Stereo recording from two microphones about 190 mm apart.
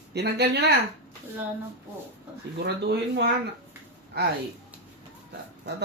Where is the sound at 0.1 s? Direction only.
60° right (ahead or behind).